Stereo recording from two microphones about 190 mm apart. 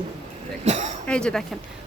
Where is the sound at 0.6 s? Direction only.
35° right (ahead or behind).